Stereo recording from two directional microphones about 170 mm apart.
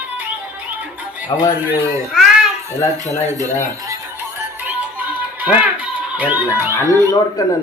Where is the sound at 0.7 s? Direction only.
10° right (ahead or behind).